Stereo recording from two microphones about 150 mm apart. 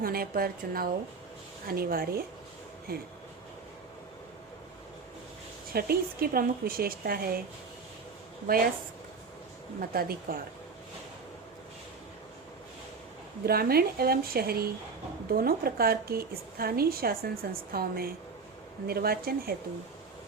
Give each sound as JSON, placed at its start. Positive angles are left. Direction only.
{"t": 0.0, "sound": "a woman's voice", "side_deg": -80}
{"t": 5.7, "sound": "speech", "side_deg": -85}
{"t": 8.4, "sound": "speech", "side_deg": -80}
{"t": 9.9, "sound": "speech", "side_deg": -85}
{"t": 13.4, "sound": "a woman's voice", "side_deg": -90}